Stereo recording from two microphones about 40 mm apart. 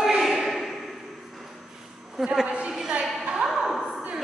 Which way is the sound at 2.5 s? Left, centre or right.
Right.